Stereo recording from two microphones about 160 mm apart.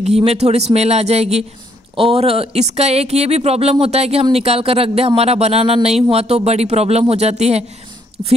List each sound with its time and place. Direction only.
0.0 s speech: 40° right (ahead or behind)
8.2 s speech: 30° right (ahead or behind)